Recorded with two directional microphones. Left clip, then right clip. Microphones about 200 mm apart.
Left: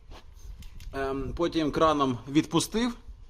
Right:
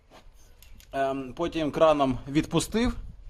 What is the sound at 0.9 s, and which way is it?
A man's voice, 5° right (ahead or behind).